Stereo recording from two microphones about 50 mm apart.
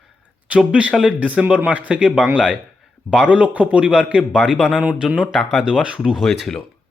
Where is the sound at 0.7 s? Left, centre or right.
Right.